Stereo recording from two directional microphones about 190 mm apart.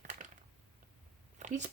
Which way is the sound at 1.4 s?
40° right (ahead or behind).